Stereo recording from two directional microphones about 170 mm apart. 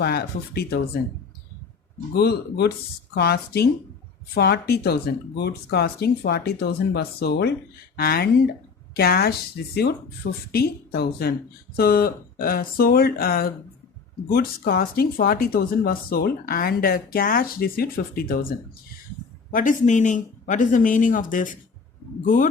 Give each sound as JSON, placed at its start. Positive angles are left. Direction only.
{"t": 0.0, "sound": "speech", "side_deg": 70}
{"t": 2.1, "sound": "speech", "side_deg": 70}
{"t": 10.5, "sound": "speech", "side_deg": 70}
{"t": 19.5, "sound": "speech", "side_deg": 50}